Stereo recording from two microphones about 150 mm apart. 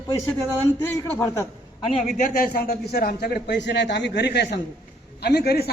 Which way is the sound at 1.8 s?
45° left (ahead or behind).